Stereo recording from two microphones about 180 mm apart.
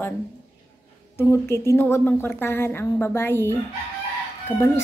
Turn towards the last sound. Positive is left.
turn(degrees=15)  # may be behind; listen again after turning